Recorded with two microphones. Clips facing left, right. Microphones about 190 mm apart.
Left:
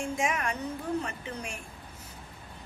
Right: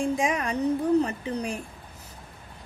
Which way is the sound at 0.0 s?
30° right (ahead or behind).